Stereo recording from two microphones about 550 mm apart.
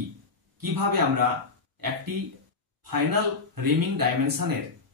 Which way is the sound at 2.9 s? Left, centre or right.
Right.